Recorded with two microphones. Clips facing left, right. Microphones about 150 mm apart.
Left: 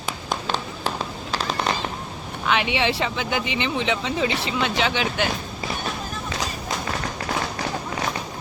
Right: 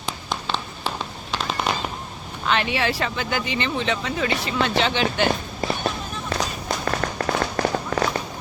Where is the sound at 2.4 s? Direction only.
10° left (ahead or behind).